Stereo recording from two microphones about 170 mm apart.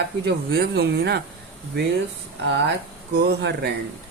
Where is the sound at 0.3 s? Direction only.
70° right (ahead or behind).